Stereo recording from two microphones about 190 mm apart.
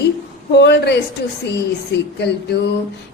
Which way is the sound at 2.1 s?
60° left (ahead or behind).